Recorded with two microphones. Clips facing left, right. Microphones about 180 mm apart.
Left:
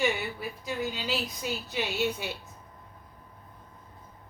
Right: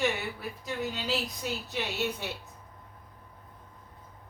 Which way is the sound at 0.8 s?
Centre (ahead or behind).